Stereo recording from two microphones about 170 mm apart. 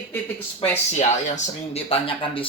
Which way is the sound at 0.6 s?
45° left (ahead or behind).